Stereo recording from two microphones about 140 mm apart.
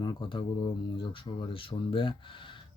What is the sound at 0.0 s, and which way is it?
Speech, 35° left (ahead or behind).